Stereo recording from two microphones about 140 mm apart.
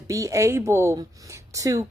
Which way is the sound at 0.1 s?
20° right (ahead or behind).